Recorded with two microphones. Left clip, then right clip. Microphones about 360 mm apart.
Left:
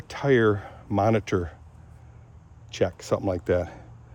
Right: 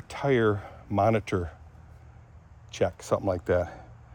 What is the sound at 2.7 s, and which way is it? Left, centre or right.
Speech, centre.